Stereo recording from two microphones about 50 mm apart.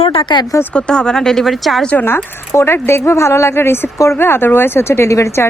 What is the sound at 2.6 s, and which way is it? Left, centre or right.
Speech, left.